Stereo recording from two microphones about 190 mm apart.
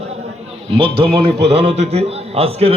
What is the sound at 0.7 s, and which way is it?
A man's voice, 30° right (ahead or behind).